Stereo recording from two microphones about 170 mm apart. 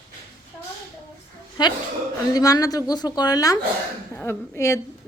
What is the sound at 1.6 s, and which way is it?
Speech, 25° left (ahead or behind).